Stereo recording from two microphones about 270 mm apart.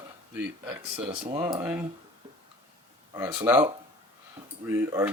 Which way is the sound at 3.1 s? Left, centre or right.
Centre.